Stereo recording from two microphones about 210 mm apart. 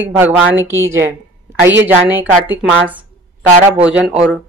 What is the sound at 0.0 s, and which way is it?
A woman's voice, 10° right (ahead or behind).